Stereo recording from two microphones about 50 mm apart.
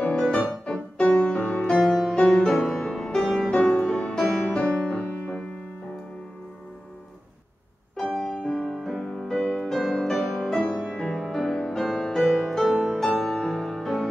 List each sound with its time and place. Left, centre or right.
0.0 s music: centre
8.0 s music: centre
10.1 s music: centre
10.5 s music: centre
11.2 s music: centre
11.5 s music: centre
12.3 s music: centre